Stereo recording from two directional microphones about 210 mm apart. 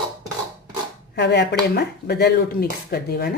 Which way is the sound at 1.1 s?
55° left (ahead or behind).